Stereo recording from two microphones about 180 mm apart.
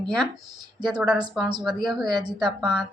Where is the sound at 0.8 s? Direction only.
5° right (ahead or behind).